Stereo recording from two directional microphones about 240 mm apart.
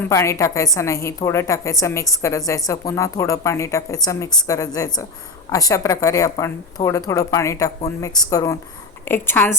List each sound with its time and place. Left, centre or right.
0.0 s a woman's voice: centre